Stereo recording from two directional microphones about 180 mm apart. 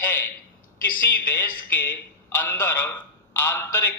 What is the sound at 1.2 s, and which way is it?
A man's voice, 10° left (ahead or behind).